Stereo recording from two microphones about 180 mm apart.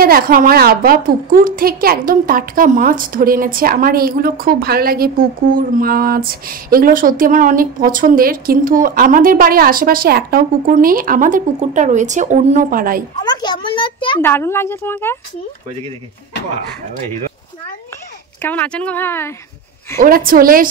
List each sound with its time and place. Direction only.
0.0 s a woman's voice: 55° right (ahead or behind)
13.2 s a child's voice: 25° left (ahead or behind)
14.2 s a woman's voice: 15° left (ahead or behind)
18.4 s a woman's voice: 10° left (ahead or behind)
20.0 s a woman's voice: 50° right (ahead or behind)